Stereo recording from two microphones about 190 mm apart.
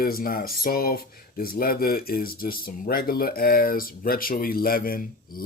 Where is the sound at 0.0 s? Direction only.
50° left (ahead or behind).